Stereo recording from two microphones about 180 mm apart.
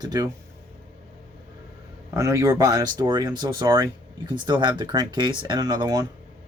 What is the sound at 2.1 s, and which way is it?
Speech, 15° right (ahead or behind).